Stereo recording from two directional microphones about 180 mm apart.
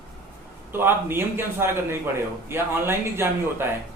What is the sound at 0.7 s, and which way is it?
A man's voice, 10° right (ahead or behind).